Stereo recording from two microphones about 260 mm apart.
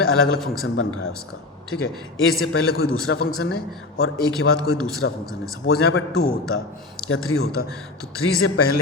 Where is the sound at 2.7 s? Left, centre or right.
Left.